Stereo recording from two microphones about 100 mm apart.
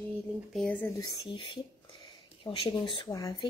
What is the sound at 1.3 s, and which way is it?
Speech, 55° left (ahead or behind).